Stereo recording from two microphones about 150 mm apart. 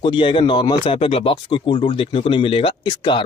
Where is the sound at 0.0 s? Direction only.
35° left (ahead or behind).